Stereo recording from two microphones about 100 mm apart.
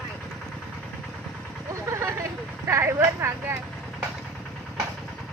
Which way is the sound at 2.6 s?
30° right (ahead or behind).